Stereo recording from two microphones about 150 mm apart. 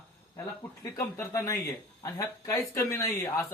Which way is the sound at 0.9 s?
20° left (ahead or behind).